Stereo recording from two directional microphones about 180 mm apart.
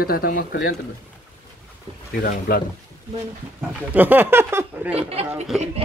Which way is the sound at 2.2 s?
55° left (ahead or behind).